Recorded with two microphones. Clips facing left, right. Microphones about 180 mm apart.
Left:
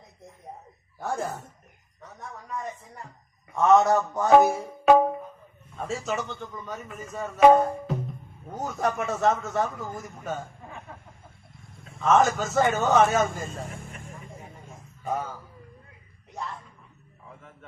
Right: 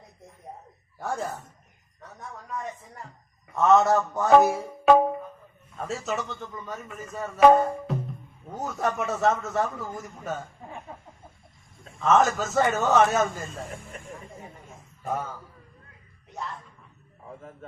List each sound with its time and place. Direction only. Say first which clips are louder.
0.9 s a man's voice: left 1 dB; centre (ahead or behind)
11.9 s a man's voice: even; centre (ahead or behind)
15.0 s a man's voice: even; centre (ahead or behind)
16.3 s music: even; centre (ahead or behind)
17.2 s a sound: right 6 dB; 40° right (ahead or behind)